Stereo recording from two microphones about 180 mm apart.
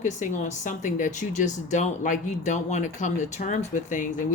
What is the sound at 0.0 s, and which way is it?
Speech, 45° left (ahead or behind).